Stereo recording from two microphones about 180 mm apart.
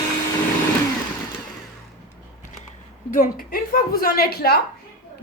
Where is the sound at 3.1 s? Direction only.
55° left (ahead or behind).